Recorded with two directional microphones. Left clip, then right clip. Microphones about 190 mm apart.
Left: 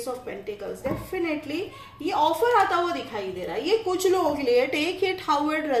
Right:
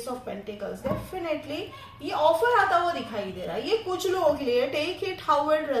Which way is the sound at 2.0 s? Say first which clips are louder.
Even; 35° left (ahead or behind).